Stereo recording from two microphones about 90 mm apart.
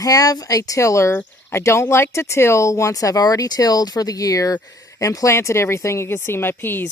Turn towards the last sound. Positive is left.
turn(degrees=25)  # may be behind; listen again after turning